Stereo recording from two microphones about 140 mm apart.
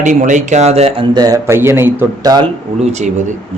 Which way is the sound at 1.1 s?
25° right (ahead or behind).